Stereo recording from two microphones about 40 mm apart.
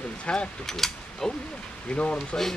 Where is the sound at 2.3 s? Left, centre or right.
Left.